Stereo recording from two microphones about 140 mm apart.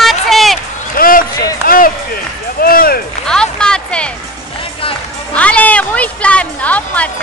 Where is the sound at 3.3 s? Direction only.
5° left (ahead or behind).